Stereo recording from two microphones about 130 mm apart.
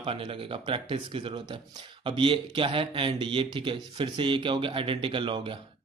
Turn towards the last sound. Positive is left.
turn(degrees=-40)  # may be behind; listen again after turning